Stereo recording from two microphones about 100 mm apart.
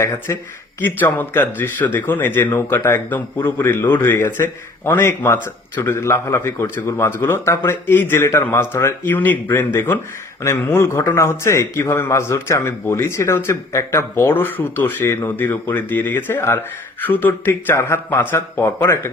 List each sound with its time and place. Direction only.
0.0 s speech: 25° left (ahead or behind)